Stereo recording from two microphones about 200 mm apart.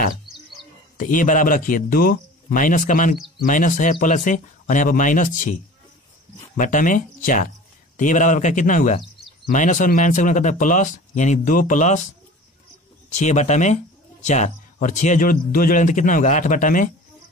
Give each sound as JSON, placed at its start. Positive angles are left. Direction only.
{"t": 0.9, "sound": "a man's voice", "side_deg": 40}
{"t": 13.1, "sound": "a man's voice", "side_deg": 35}